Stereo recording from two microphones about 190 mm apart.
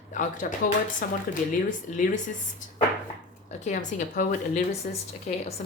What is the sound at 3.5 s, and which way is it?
A woman's voice, 40° left (ahead or behind).